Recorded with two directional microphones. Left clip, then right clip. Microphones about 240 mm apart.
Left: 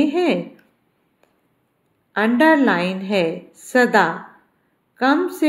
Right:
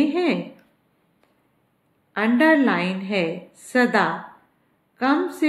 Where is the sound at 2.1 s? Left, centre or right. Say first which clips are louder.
Left 3 dB; centre.